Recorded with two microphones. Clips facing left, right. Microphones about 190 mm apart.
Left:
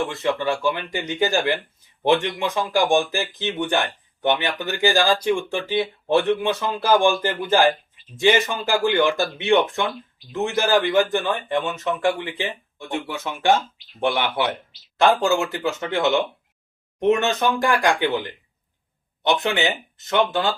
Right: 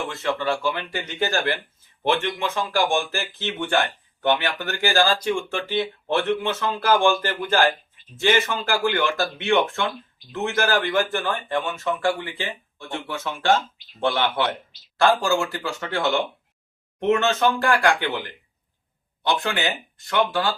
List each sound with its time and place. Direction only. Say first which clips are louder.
0.1 s speech: left 2 dB; 15° left (ahead or behind)